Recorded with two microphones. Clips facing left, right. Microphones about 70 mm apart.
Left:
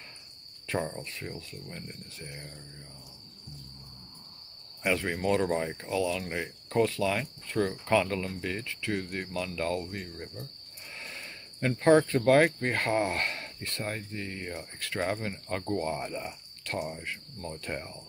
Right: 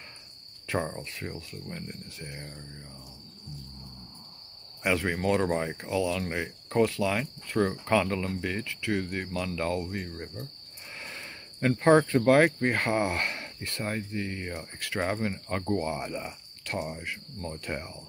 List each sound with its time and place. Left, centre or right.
0.7 s speech: centre
4.8 s speech: right
10.9 s a sound: right
11.8 s speech: right